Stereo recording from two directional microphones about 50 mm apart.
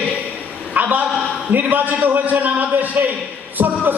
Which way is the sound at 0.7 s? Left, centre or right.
Right.